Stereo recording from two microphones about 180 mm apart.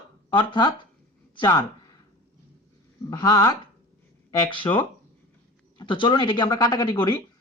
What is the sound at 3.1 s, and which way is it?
Speech, 20° left (ahead or behind).